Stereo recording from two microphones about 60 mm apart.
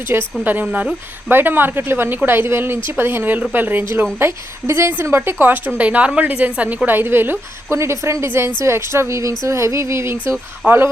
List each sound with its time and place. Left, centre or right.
0.1 s speech: right
0.4 s a woman's voice: right
1.3 s speech: right
4.2 s a woman's voice: right
7.8 s a woman's voice: right
10.6 s a woman's voice: right